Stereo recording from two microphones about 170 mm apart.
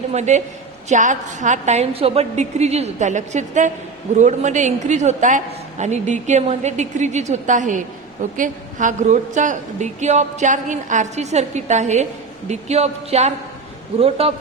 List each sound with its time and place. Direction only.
0.1 s a woman's voice: 45° right (ahead or behind)